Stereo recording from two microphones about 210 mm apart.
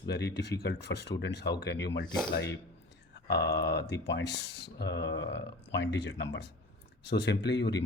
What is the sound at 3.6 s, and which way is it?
Speech, 55° left (ahead or behind).